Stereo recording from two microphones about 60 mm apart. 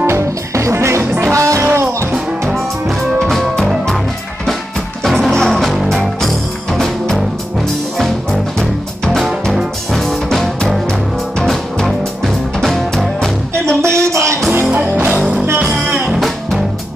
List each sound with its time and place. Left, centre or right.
0.0 s music: right
2.4 s music: centre
5.0 s music: centre
13.7 s a sound: right
14.5 s music: right
15.6 s music: centre
16.1 s music: centre